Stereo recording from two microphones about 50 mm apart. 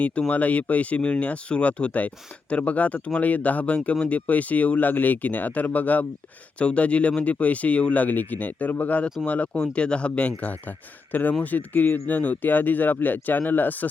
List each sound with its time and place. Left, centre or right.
0.0 s speech: left